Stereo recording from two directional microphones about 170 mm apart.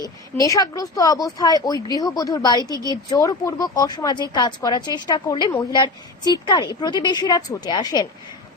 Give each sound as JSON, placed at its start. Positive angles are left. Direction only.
{"t": 0.4, "sound": "speech", "side_deg": 20}